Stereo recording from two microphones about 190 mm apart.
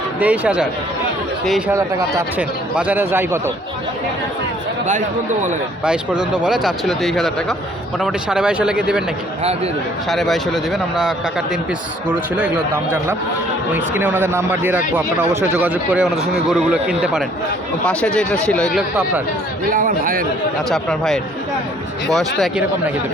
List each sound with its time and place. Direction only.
0.2 s a man's voice: 5° right (ahead or behind)
2.7 s a man's voice: 10° right (ahead or behind)
4.9 s speech: 40° right (ahead or behind)
5.8 s speech: 5° right (ahead or behind)
10.1 s a man's voice: centre (ahead or behind)
19.7 s a man's voice: 45° right (ahead or behind)
20.7 s speech: centre (ahead or behind)